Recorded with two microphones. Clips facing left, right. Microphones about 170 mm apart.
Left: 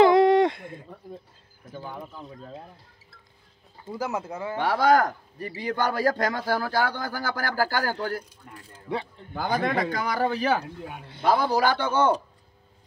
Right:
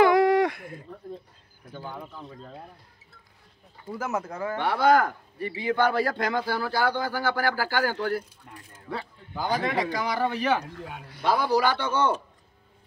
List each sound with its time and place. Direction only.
0.0 s a sound: 25° left (ahead or behind)
1.9 s speech: centre (ahead or behind)
4.0 s speech: 30° left (ahead or behind)
4.6 s a man's voice: 40° left (ahead or behind)
9.3 s a man's voice: 55° left (ahead or behind)
10.2 s a man's voice: 35° left (ahead or behind)